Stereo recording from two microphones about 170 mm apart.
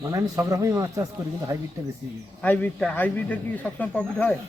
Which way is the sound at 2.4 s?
10° left (ahead or behind).